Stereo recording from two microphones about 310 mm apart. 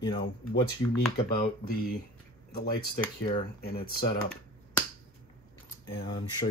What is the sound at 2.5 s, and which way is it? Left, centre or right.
Speech, left.